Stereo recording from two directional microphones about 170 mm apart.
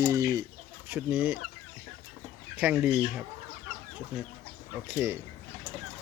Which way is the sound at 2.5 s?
10° right (ahead or behind).